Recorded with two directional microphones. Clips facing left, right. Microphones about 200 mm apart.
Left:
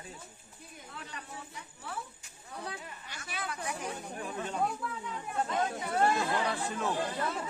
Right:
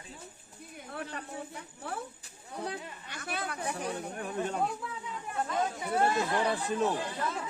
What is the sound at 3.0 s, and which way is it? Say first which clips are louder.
Speech: right 3 dB; 60° right (ahead or behind).